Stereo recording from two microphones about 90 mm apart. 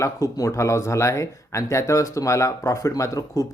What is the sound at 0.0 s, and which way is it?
Speech, 35° left (ahead or behind).